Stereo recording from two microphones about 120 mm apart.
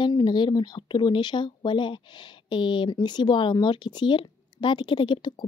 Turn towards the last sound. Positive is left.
turn(degrees=40)  # may be behind; listen again after turning